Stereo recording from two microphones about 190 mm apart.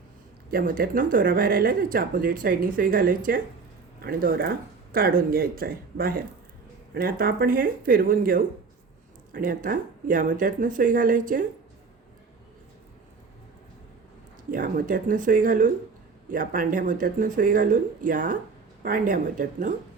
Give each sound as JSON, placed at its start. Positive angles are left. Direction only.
{"t": 0.5, "sound": "speech", "side_deg": -50}
{"t": 14.5, "sound": "speech", "side_deg": -45}